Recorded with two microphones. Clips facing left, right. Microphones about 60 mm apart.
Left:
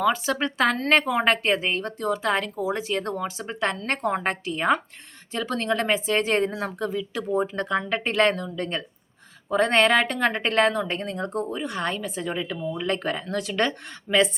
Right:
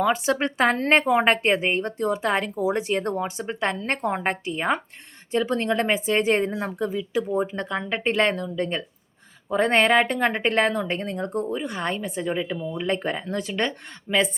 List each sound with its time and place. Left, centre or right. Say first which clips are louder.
0.0 s a woman's voice: right 1 dB; right; by 14.3 s centre